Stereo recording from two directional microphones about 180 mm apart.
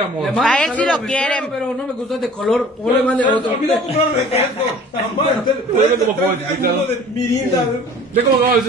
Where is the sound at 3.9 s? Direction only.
35° left (ahead or behind).